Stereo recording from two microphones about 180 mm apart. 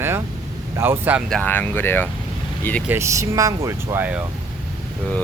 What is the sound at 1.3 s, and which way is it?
Speech, 10° left (ahead or behind).